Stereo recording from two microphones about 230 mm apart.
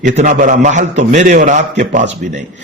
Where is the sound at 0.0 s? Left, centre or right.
Right.